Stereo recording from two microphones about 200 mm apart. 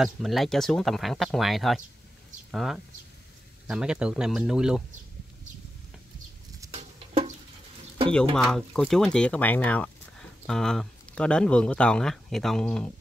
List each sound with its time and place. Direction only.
0.0 s speech: centre (ahead or behind)
6.7 s patter: 30° right (ahead or behind)
8.4 s speech: 5° left (ahead or behind)